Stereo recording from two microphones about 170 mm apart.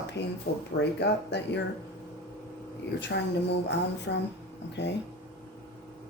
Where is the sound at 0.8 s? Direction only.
80° left.